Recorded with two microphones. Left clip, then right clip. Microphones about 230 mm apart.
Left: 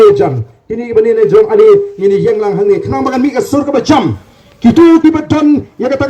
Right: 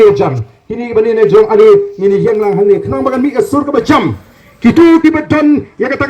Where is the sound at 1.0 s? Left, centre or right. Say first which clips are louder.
Right 1 dB; left.